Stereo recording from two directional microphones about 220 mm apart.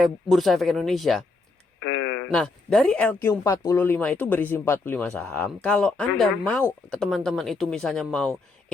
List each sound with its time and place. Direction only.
0.0 s speech: centre (ahead or behind)
1.8 s speech: 60° left (ahead or behind)
2.3 s speech: centre (ahead or behind)